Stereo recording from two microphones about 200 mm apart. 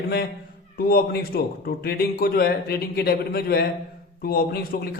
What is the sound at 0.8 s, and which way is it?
A man's voice, 50° left (ahead or behind).